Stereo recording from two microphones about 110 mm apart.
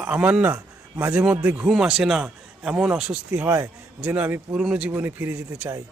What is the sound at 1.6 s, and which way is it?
A man's voice, 5° right (ahead or behind).